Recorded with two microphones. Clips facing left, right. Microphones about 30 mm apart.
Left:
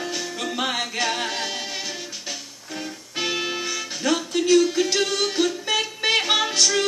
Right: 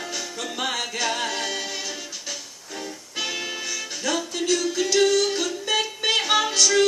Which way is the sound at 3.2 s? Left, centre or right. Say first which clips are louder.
Left 3 dB; left.